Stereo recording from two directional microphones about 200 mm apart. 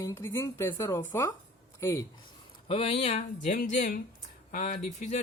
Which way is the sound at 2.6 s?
30° left (ahead or behind).